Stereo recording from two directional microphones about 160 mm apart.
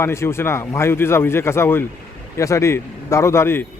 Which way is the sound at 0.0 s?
15° left (ahead or behind).